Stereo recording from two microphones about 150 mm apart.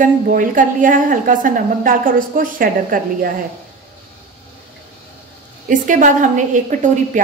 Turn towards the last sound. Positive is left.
turn(degrees=-60)  # may be behind; listen again after turning